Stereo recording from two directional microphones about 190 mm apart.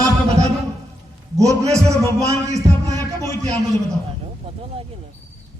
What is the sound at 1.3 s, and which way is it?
Speech, 15° right (ahead or behind).